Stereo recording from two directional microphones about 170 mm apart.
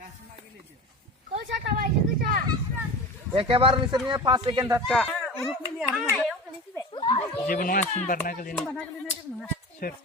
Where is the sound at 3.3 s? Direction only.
30° right (ahead or behind).